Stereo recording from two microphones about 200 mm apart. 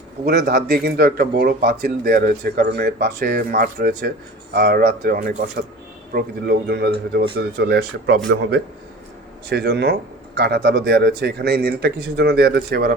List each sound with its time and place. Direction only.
0.3 s speech: 55° right (ahead or behind)